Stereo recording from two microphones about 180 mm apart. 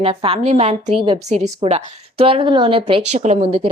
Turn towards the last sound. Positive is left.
turn(degrees=-30)  # may be behind; listen again after turning